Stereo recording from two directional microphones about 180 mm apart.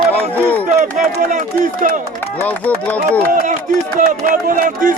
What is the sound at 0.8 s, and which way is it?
Speech, 45° right (ahead or behind).